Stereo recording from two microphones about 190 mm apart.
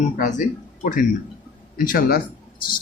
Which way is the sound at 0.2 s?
40° left (ahead or behind).